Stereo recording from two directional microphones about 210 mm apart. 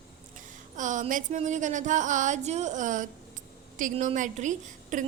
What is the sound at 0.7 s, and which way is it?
A woman's voice, 35° right (ahead or behind).